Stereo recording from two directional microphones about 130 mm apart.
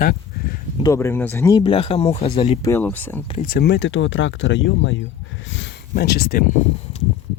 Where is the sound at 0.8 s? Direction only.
20° left (ahead or behind).